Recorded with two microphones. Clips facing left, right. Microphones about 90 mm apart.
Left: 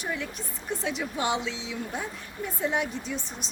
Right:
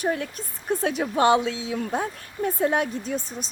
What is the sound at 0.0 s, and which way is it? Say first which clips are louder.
Speech: right 7 dB; 50° right (ahead or behind).